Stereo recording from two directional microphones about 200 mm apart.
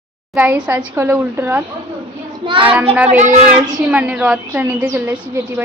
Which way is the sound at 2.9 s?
5° right (ahead or behind).